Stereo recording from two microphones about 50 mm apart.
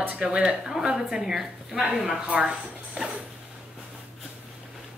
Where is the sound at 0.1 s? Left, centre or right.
Right.